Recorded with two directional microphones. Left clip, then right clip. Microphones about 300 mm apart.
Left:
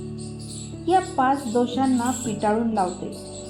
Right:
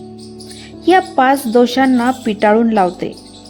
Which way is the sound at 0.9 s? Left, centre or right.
Right.